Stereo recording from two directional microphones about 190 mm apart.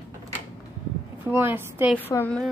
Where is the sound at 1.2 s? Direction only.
10° right (ahead or behind).